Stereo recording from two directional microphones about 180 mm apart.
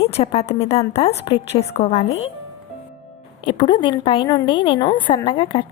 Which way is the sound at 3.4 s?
30° left (ahead or behind).